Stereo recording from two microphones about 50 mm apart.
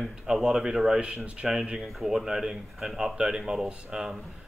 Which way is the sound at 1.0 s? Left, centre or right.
Right.